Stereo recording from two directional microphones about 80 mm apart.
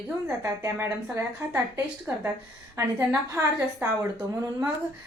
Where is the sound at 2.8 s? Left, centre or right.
Right.